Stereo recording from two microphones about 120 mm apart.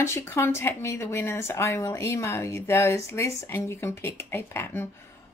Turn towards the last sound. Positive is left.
turn(degrees=20)  # may be behind; listen again after turning